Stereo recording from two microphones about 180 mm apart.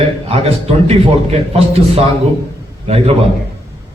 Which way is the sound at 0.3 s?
35° right (ahead or behind).